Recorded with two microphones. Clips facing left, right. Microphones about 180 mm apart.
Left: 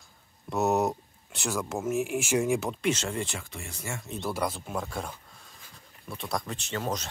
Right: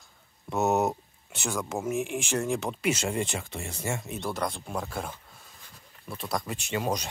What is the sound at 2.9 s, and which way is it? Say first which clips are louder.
Speech: right 2 dB; 10° right (ahead or behind).